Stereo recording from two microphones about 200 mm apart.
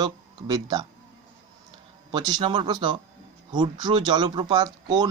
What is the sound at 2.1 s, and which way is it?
Speech, 20° right (ahead or behind).